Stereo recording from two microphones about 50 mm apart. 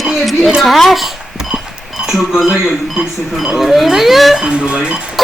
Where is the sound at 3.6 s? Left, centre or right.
Centre.